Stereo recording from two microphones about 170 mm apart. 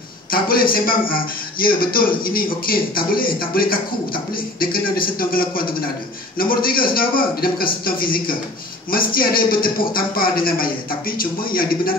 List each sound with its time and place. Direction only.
0.3 s a man's voice: 60° left (ahead or behind)